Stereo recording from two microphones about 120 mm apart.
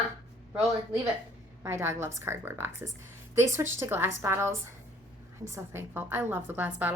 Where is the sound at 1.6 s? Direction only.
25° right (ahead or behind).